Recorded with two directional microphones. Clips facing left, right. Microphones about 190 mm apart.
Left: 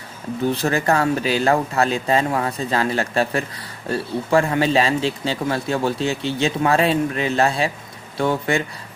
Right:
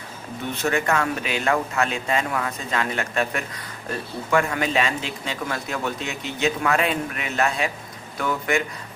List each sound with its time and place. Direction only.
0.4 s speech: 35° left (ahead or behind)